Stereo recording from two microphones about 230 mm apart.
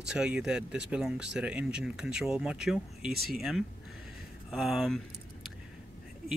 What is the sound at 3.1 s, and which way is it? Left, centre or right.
Speech, right.